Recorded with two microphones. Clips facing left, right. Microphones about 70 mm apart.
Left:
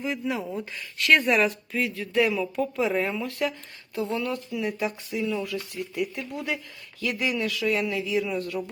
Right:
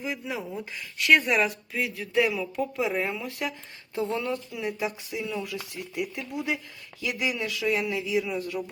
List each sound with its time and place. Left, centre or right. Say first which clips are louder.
0.0 s speech: left 4 dB; centre
3.9 s speech: even; right; by 8.6 s centre